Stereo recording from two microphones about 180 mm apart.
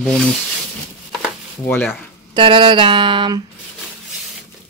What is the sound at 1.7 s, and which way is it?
Speech, 5° left (ahead or behind).